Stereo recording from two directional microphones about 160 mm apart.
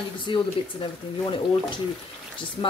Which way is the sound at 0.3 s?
30° left (ahead or behind).